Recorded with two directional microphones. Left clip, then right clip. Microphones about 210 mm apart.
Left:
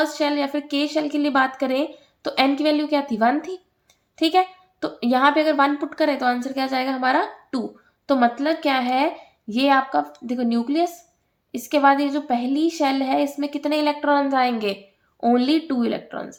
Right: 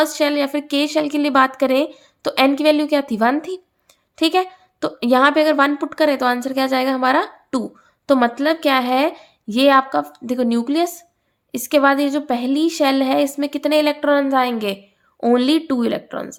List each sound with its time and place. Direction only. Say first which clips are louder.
0.0 s a woman's voice: right 4 dB; 35° right (ahead or behind)